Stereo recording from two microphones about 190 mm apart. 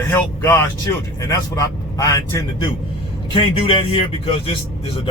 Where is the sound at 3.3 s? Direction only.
30° left (ahead or behind).